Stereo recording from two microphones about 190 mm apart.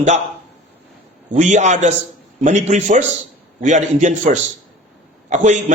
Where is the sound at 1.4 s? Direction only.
40° right (ahead or behind).